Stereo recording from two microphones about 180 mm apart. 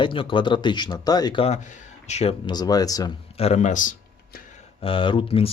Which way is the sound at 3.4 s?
35° left (ahead or behind).